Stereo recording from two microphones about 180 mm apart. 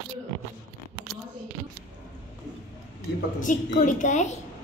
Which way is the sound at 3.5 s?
45° left (ahead or behind).